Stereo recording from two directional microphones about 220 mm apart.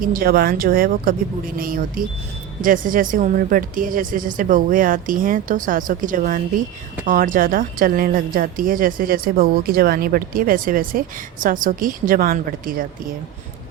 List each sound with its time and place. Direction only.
0.0 s speech: 40° right (ahead or behind)